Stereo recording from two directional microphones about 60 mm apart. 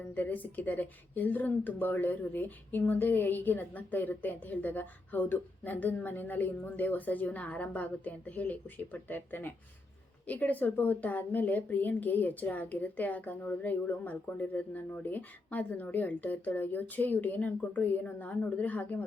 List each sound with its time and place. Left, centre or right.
0.1 s speech: left